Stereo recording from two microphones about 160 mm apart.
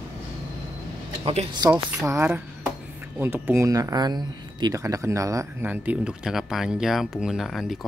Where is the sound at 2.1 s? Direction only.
15° right (ahead or behind).